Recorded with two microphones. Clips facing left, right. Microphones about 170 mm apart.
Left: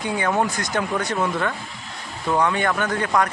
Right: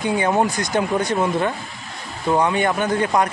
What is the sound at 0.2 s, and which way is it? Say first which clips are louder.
Speech: right 1 dB; 20° right (ahead or behind).